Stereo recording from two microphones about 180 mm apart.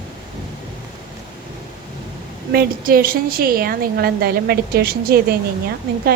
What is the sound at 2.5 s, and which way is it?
A woman's voice, 55° right (ahead or behind).